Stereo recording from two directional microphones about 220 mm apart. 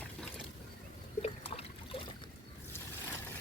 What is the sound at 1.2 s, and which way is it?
Trickle, 25° left (ahead or behind).